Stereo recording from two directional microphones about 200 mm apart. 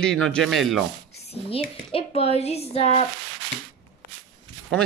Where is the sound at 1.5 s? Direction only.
30° left (ahead or behind).